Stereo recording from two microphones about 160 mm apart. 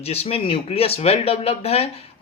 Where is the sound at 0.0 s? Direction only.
40° left (ahead or behind).